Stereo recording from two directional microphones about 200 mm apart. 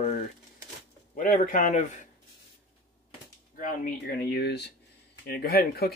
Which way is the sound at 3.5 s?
45° left (ahead or behind).